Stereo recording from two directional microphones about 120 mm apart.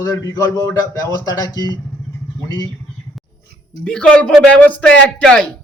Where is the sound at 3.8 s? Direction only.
10° left (ahead or behind).